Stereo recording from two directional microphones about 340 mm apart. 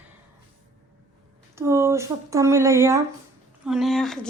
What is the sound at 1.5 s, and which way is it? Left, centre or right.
A woman's voice, centre.